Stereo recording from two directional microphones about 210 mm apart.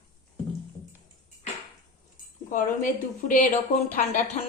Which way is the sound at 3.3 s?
40° left (ahead or behind).